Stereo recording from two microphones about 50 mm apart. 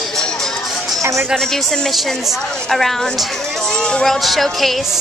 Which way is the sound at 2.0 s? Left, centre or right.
Centre.